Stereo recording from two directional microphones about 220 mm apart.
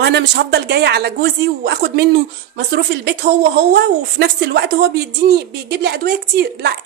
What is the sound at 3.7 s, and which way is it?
Speech, 50° right (ahead or behind).